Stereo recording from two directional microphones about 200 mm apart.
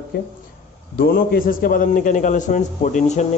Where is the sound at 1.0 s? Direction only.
45° left (ahead or behind).